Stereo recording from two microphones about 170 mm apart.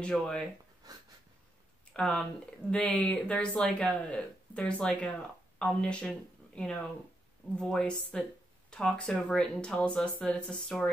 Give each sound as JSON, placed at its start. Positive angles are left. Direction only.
{"t": 0.0, "sound": "speech", "side_deg": 5}
{"t": 0.8, "sound": "a sound", "side_deg": -20}
{"t": 2.0, "sound": "speech", "side_deg": 5}